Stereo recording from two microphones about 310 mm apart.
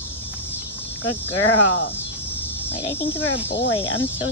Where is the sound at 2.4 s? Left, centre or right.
Centre.